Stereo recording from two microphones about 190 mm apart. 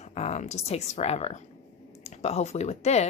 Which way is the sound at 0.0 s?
35° left (ahead or behind).